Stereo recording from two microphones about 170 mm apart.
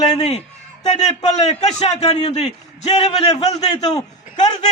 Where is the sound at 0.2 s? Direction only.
40° left (ahead or behind).